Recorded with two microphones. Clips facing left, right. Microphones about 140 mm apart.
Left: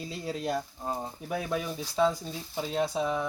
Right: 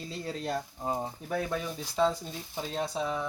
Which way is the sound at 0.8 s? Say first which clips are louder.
Right 5 dB; 15° right (ahead or behind).